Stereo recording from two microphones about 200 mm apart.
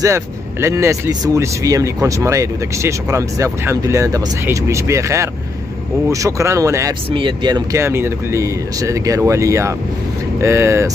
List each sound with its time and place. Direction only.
0.0 s speech: 15° right (ahead or behind)